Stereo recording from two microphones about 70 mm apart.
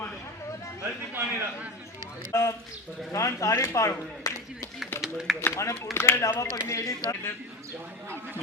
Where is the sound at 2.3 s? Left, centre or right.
Left.